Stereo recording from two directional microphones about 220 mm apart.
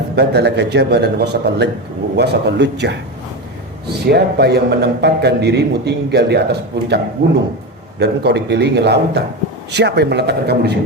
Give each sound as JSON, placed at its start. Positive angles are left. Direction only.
{"t": 0.2, "sound": "a man's voice", "side_deg": -50}
{"t": 4.0, "sound": "a man's voice", "side_deg": -45}